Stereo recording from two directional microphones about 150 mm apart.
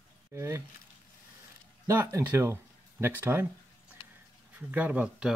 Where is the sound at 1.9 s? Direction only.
20° right (ahead or behind).